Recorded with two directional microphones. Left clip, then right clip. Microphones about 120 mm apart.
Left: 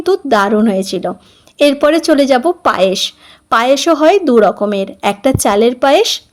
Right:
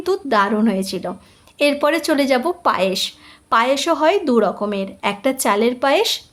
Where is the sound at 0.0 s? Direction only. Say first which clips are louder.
Left 6 dB; 35° left (ahead or behind).